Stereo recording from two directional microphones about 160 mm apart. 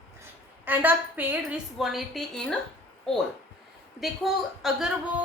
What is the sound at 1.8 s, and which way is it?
A woman's voice, centre (ahead or behind).